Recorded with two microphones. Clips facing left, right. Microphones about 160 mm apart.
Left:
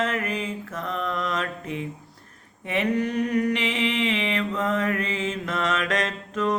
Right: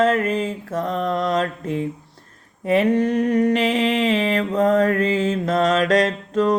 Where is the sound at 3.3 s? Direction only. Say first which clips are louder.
Right 6 dB; 30° right (ahead or behind).